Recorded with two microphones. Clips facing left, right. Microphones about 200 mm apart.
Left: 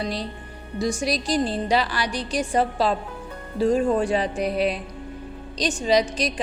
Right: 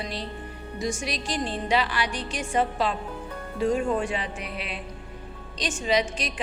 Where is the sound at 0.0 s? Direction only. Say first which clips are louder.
Left 4 dB; 40° left (ahead or behind).